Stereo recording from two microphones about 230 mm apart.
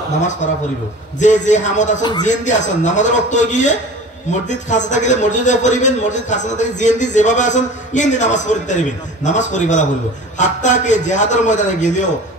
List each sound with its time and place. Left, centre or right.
0.2 s a man's voice: left